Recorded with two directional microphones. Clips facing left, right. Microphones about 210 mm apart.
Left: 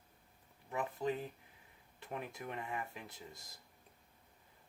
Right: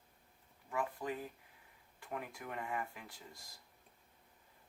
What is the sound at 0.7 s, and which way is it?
Speech, 20° left (ahead or behind).